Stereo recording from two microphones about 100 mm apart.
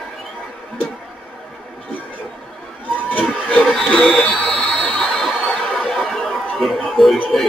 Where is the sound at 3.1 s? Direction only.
15° left (ahead or behind).